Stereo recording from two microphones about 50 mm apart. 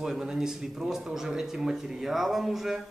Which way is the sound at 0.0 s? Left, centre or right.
Centre.